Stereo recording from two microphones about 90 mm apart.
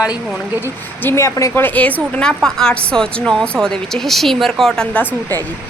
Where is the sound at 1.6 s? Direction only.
20° left (ahead or behind).